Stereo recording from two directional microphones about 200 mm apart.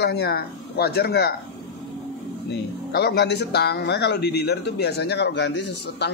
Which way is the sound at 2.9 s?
55° left (ahead or behind).